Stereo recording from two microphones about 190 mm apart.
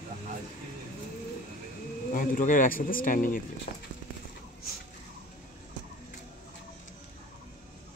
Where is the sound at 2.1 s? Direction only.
45° left (ahead or behind).